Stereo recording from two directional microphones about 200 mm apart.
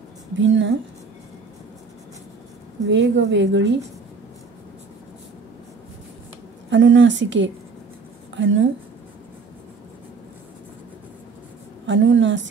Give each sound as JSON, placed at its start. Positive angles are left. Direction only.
{"t": 0.4, "sound": "a woman's voice", "side_deg": -65}
{"t": 2.9, "sound": "a woman's voice", "side_deg": -65}
{"t": 6.7, "sound": "a woman's voice", "side_deg": -70}
{"t": 11.8, "sound": "a woman's voice", "side_deg": -70}